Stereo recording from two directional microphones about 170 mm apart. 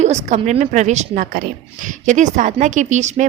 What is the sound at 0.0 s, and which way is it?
A woman's voice, 45° right (ahead or behind).